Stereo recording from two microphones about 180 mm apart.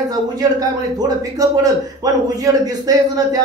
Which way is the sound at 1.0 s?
20° right (ahead or behind).